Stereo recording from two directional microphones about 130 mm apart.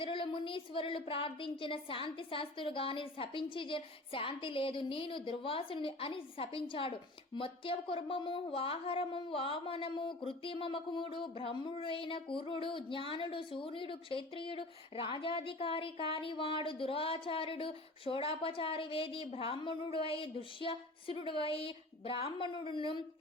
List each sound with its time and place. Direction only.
0.0 s a woman's voice: 40° left (ahead or behind)